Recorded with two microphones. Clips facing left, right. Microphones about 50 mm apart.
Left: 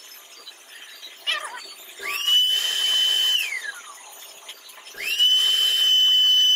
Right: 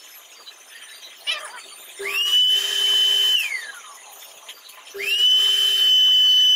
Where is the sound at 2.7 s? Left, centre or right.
Centre.